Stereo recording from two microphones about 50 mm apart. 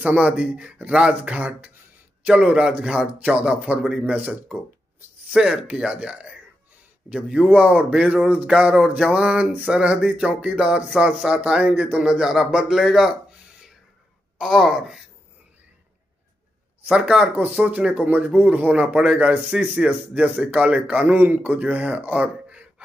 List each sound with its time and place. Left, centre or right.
0.2 s a man's voice: right
5.3 s a man's voice: centre
8.2 s speech: right
8.5 s a man's voice: centre
9.0 s speech: centre
14.4 s speech: centre
17.0 s speech: centre
17.4 s speech: right
19.5 s speech: centre
19.9 s a man's voice: right
21.1 s a man's voice: right
21.5 s speech: right